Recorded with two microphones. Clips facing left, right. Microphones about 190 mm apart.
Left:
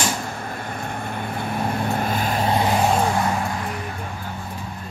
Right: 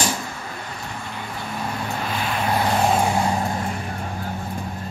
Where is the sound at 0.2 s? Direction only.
50° left (ahead or behind).